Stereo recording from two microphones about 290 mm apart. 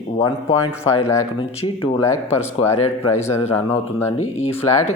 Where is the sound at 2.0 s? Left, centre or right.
Centre.